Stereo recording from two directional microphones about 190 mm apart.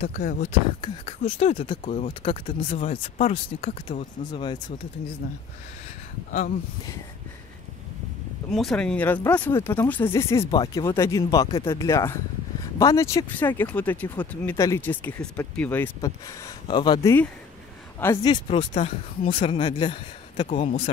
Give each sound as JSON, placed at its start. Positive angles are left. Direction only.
{"t": 0.2, "sound": "speech", "side_deg": 55}
{"t": 0.5, "sound": "speech", "side_deg": 25}
{"t": 5.2, "sound": "speech", "side_deg": 45}
{"t": 8.5, "sound": "speech", "side_deg": 0}
{"t": 10.6, "sound": "speech", "side_deg": 25}
{"t": 10.9, "sound": "speech", "side_deg": 15}
{"t": 20.4, "sound": "speech", "side_deg": 40}